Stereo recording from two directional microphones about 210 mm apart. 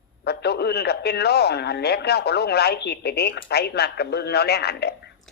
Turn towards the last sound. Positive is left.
turn(degrees=50)  # may be behind; listen again after turning